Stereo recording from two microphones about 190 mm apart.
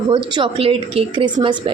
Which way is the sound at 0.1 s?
25° right (ahead or behind).